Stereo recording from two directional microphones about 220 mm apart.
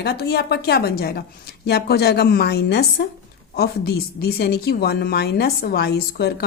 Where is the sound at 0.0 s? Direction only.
50° left (ahead or behind).